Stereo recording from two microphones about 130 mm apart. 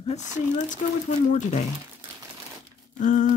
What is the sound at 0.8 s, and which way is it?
Speech, 90° left.